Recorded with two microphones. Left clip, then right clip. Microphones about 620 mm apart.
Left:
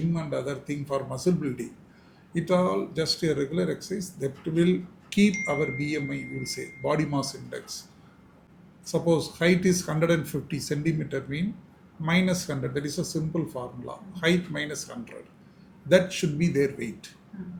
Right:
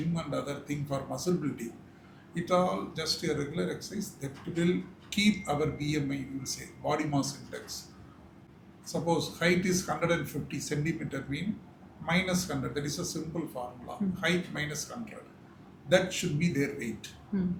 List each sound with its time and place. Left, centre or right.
0.1 s speech: left
8.9 s speech: left
15.9 s speech: left